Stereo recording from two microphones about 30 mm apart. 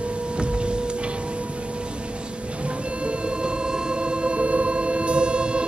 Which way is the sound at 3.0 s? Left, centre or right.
Right.